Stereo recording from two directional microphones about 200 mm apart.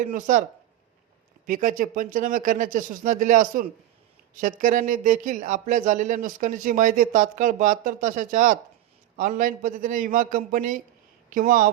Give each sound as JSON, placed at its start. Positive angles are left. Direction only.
{"t": 0.0, "sound": "speech", "side_deg": -40}
{"t": 1.5, "sound": "speech", "side_deg": -40}